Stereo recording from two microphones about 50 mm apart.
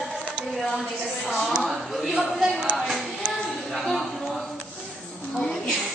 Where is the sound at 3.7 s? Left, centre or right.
Centre.